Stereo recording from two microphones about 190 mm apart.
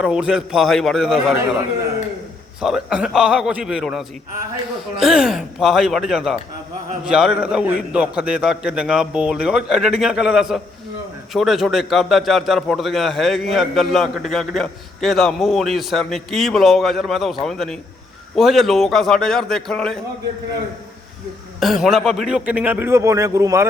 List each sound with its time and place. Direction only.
0.0 s a man's voice: 5° right (ahead or behind)
2.6 s a man's voice: 5° right (ahead or behind)
21.6 s a man's voice: centre (ahead or behind)